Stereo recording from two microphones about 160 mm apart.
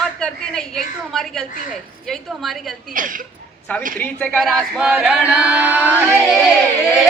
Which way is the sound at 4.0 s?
10° left (ahead or behind).